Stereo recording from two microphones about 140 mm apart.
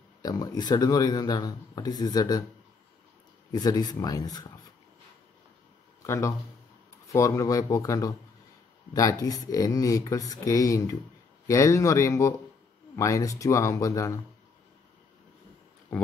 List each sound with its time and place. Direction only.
0.2 s speech: 25° left (ahead or behind)
3.5 s speech: 30° left (ahead or behind)
6.0 s speech: 20° left (ahead or behind)